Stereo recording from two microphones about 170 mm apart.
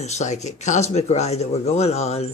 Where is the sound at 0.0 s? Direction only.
40° left (ahead or behind).